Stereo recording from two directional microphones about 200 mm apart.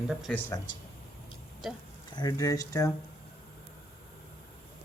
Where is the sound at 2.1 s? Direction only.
20° left (ahead or behind).